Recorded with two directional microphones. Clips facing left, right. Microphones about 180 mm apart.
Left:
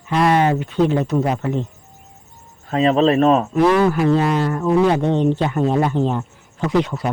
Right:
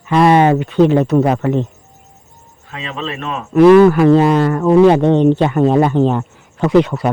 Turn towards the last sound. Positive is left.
turn(degrees=-65)  # may be behind; listen again after turning